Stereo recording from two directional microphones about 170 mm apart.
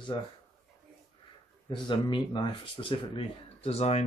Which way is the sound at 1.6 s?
25° left (ahead or behind).